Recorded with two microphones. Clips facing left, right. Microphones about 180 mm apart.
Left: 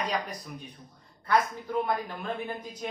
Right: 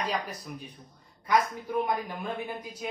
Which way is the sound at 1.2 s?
15° right (ahead or behind).